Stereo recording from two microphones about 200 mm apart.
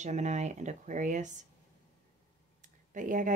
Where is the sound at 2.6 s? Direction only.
40° right (ahead or behind).